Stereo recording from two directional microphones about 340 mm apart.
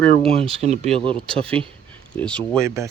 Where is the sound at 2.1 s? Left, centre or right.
Centre.